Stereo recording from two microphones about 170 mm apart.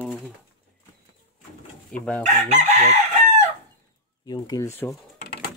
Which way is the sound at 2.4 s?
40° right (ahead or behind).